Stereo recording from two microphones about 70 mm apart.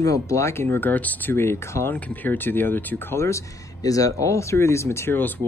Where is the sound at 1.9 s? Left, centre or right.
Left.